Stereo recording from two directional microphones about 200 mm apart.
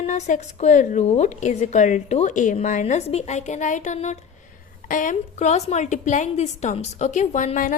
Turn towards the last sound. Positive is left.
turn(degrees=40)  # may be behind; listen again after turning